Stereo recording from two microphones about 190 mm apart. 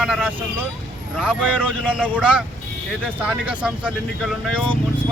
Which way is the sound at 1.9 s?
5° right (ahead or behind).